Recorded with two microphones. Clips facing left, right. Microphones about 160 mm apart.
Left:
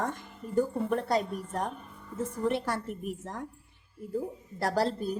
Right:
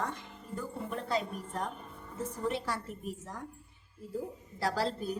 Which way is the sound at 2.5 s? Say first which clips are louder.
Left 5 dB; 60° left (ahead or behind).